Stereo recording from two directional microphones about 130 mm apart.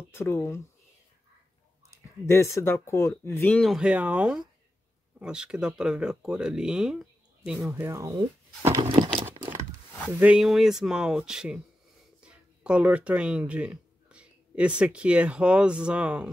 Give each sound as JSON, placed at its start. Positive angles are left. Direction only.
{"t": 0.1, "sound": "speech", "side_deg": 20}
{"t": 2.2, "sound": "speech", "side_deg": 20}
{"t": 3.5, "sound": "speech", "side_deg": 0}
{"t": 7.7, "sound": "speech", "side_deg": -20}
{"t": 8.8, "sound": "a sound", "side_deg": -45}
{"t": 10.2, "sound": "speech", "side_deg": -5}